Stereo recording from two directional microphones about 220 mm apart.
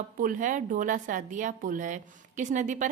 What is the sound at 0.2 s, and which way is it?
A woman's voice, 35° right (ahead or behind).